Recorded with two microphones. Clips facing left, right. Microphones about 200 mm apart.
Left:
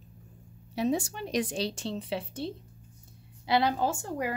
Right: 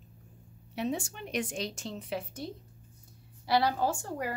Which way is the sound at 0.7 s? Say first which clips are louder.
Left 5 dB; 40° left (ahead or behind).